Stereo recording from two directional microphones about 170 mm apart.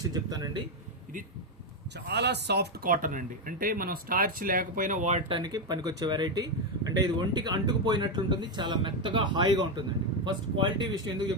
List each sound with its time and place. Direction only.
0.0 s speech: 20° right (ahead or behind)
2.0 s speech: 80° right; by 5.2 s 45° right (ahead or behind)
5.3 s speech: 25° right (ahead or behind)